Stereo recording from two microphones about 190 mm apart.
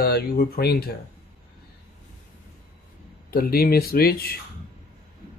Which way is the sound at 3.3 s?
55° left (ahead or behind).